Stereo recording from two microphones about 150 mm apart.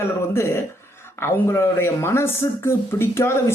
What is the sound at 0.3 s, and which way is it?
A woman's voice, 15° left (ahead or behind).